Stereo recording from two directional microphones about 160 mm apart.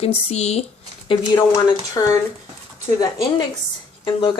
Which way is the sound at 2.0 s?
20° left (ahead or behind).